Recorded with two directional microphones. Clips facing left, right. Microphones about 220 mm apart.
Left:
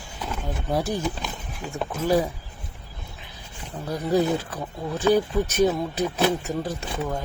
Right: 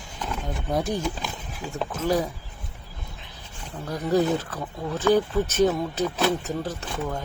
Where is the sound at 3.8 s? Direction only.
10° left (ahead or behind).